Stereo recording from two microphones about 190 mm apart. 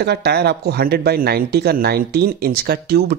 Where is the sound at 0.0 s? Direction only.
60° right (ahead or behind).